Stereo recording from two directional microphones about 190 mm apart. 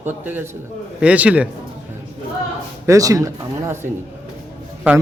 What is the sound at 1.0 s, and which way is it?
Speech, 5° right (ahead or behind).